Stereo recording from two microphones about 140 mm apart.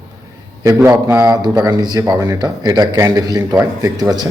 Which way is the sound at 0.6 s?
20° right (ahead or behind).